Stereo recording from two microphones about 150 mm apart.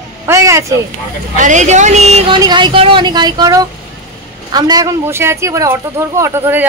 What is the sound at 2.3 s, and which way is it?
Speech, 30° right (ahead or behind).